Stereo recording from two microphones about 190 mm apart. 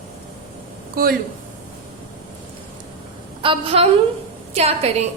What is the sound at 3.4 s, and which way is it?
A woman's voice, 30° right (ahead or behind).